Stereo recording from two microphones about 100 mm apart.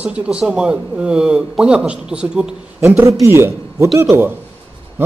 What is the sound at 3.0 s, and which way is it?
A man's voice, 30° right (ahead or behind).